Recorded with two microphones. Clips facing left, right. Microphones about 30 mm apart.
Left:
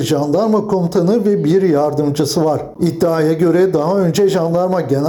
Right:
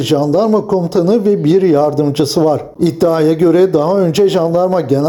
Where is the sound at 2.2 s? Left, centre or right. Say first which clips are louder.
Right 3 dB; right.